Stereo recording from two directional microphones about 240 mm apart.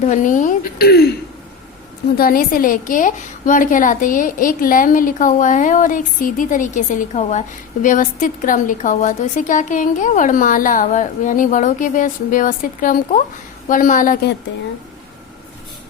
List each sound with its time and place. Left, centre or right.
0.0 s a woman's voice: left
2.1 s a woman's voice: left